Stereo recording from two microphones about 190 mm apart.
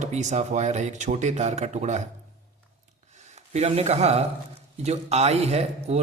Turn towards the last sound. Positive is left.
turn(degrees=-35)  # may be behind; listen again after turning